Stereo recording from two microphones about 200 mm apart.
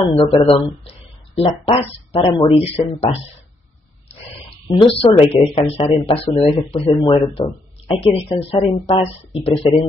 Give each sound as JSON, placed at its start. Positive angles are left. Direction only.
{"t": 0.1, "sound": "speech", "side_deg": 30}
{"t": 4.6, "sound": "speech", "side_deg": 25}